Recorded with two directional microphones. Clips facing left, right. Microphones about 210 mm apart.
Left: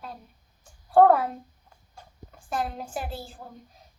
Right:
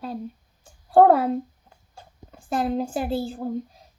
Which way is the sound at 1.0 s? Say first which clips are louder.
Right 3 dB; 30° right (ahead or behind).